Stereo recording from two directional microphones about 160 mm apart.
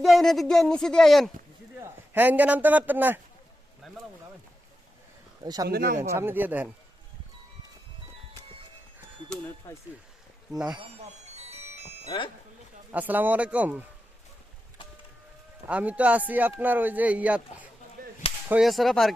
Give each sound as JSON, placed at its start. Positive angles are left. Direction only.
{"t": 0.0, "sound": "speech", "side_deg": 0}
{"t": 1.8, "sound": "a man's voice", "side_deg": -10}
{"t": 5.4, "sound": "speech", "side_deg": -25}
{"t": 5.6, "sound": "speech", "side_deg": -70}
{"t": 6.0, "sound": "speech", "side_deg": -15}
{"t": 9.3, "sound": "speech", "side_deg": 5}
{"t": 11.3, "sound": "music", "side_deg": -40}
{"t": 12.1, "sound": "speech", "side_deg": 30}
{"t": 12.9, "sound": "speech", "side_deg": -10}
{"t": 15.6, "sound": "speech", "side_deg": -10}